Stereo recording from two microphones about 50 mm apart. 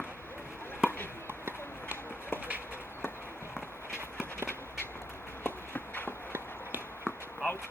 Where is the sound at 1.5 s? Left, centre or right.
Left.